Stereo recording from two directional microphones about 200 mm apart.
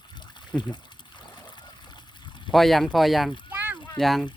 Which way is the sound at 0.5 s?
5° left (ahead or behind).